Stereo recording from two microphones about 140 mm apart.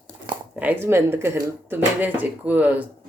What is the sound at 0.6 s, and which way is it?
Speech, 15° right (ahead or behind).